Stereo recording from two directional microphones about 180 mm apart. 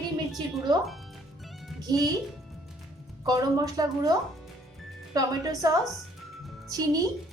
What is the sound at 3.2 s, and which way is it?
A woman's voice, 20° right (ahead or behind).